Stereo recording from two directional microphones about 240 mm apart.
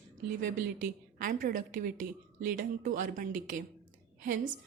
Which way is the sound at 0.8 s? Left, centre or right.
Right.